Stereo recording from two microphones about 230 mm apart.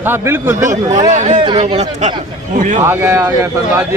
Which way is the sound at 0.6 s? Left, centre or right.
Right.